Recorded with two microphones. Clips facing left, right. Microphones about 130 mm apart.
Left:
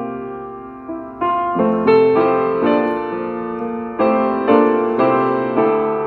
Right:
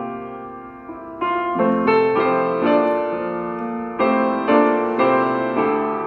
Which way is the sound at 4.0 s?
30° left (ahead or behind).